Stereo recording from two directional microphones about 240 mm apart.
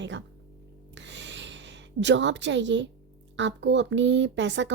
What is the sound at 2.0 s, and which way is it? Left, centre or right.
A woman's voice, right.